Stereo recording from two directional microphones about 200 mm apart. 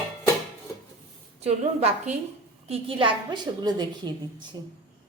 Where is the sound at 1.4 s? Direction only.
30° right (ahead or behind).